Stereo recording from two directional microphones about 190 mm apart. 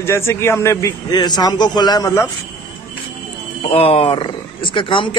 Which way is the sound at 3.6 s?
30° left (ahead or behind).